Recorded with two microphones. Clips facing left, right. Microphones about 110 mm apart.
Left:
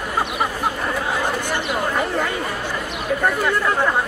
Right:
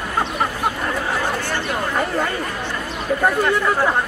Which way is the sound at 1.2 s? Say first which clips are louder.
Even; 15° left (ahead or behind).